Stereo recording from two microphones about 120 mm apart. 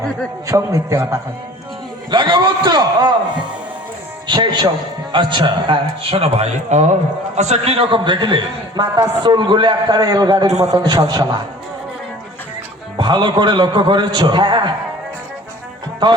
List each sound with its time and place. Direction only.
0.4 s a man's voice: 25° right (ahead or behind)
2.0 s a man's voice: 45° right (ahead or behind)
13.0 s a man's voice: 40° right (ahead or behind)
16.0 s a man's voice: 40° right (ahead or behind)